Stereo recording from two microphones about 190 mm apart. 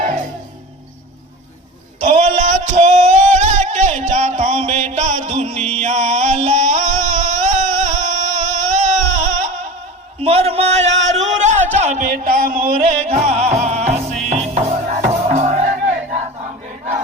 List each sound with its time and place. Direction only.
2.0 s music: 40° right (ahead or behind)
10.2 s a sound: 30° right (ahead or behind)
12.1 s music: 50° right (ahead or behind)